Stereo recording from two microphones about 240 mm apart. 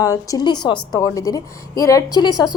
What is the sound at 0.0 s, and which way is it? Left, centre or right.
A woman's voice, centre.